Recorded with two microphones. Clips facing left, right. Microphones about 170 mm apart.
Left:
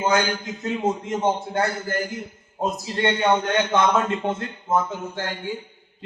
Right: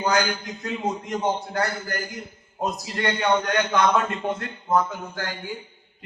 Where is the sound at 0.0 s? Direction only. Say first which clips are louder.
Left 2 dB; 25° left (ahead or behind).